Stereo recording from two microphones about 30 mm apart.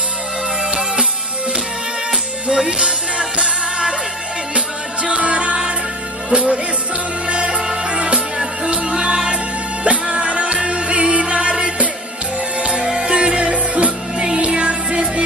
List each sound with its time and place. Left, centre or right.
2.5 s music: right
7.6 s music: right
9.8 s music: right
14.1 s music: right
14.4 s music: right